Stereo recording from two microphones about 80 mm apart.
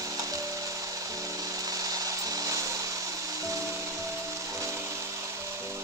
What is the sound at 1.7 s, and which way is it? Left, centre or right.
Tools, right.